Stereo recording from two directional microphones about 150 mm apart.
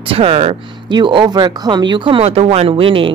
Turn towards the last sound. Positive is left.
turn(degrees=-35)  # may be behind; listen again after turning